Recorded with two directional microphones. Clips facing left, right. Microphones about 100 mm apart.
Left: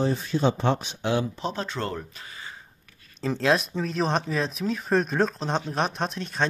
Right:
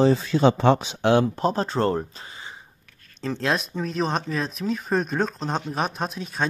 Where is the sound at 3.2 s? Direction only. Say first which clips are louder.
Left 2 dB; centre (ahead or behind).